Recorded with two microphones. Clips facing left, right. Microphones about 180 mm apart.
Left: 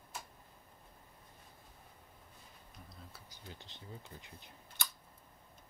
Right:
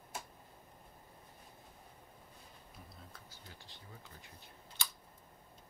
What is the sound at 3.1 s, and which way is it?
Bee, 20° left (ahead or behind).